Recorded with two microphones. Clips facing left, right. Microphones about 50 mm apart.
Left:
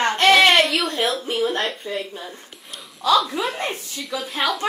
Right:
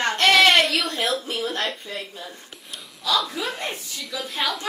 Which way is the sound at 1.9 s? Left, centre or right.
Left.